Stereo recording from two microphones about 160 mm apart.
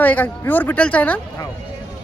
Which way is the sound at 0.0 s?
10° left (ahead or behind).